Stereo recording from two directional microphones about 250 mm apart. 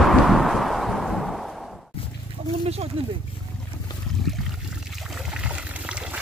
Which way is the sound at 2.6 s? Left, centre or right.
Right.